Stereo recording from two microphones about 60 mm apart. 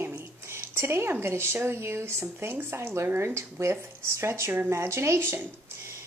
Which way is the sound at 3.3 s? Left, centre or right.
Right.